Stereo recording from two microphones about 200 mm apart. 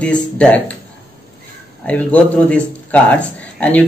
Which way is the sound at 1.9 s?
5° left (ahead or behind).